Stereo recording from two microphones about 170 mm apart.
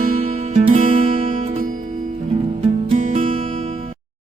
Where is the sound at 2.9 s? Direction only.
45° right (ahead or behind).